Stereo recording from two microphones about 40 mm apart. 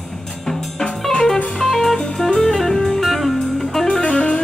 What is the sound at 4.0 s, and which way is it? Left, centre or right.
Music, left.